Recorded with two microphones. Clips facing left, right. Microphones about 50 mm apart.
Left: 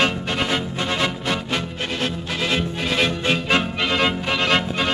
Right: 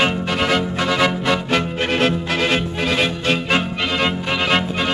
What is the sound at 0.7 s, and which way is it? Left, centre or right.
Music, right.